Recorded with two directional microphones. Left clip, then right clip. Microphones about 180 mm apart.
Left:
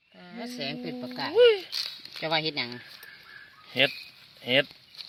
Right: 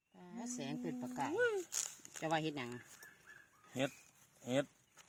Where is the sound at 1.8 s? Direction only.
25° right (ahead or behind).